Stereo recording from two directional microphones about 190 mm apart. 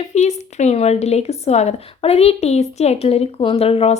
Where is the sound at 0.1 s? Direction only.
35° left (ahead or behind).